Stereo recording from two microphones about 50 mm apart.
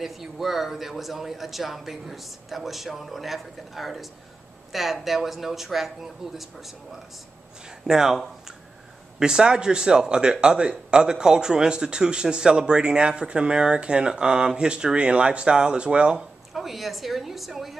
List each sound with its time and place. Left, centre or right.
0.0 s a man's voice: centre
9.2 s speech: centre
16.5 s a man's voice: centre